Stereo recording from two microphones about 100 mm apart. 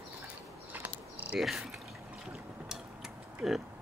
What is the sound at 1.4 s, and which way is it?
Speech, centre (ahead or behind).